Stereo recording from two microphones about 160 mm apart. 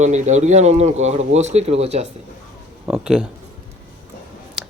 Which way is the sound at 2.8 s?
5° right (ahead or behind).